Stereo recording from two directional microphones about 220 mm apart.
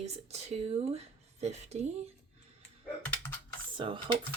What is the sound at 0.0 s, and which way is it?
Speech, 30° right (ahead or behind).